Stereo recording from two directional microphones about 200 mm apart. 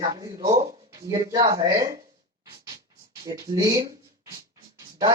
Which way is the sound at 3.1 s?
15° right (ahead or behind).